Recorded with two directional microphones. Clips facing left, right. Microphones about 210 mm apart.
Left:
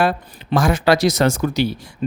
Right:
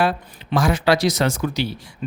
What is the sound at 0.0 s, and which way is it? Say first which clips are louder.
Speech: left 2 dB; 50° left (ahead or behind).